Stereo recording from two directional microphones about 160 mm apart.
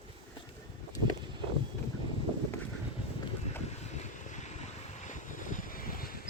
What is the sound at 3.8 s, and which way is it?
Vehicle, 45° left (ahead or behind).